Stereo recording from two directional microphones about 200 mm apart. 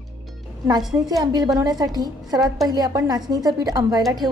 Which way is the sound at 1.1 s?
20° right (ahead or behind).